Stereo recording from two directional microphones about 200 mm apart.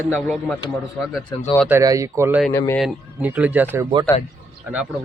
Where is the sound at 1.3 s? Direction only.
20° left (ahead or behind).